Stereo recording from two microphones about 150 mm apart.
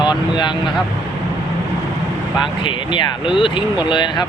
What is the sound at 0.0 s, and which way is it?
Speech, 30° left (ahead or behind).